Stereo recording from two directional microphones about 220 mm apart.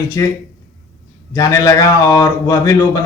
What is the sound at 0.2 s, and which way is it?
Speech, 15° left (ahead or behind).